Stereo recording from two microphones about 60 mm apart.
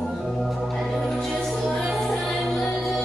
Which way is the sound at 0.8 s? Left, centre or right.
Centre.